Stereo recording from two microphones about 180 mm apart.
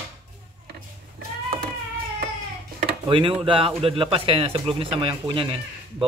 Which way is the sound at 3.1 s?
30° right (ahead or behind).